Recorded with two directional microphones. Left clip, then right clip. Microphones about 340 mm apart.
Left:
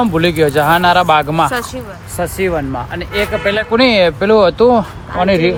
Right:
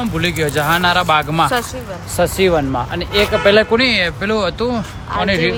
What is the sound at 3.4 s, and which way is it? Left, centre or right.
Speech, right.